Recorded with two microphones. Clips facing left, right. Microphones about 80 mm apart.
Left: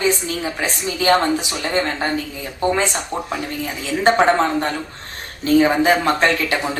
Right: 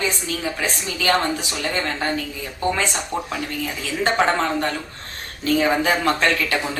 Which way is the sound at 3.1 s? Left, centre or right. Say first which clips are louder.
Left 2 dB; left.